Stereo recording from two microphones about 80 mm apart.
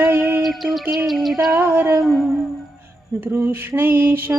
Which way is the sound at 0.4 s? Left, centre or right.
Centre.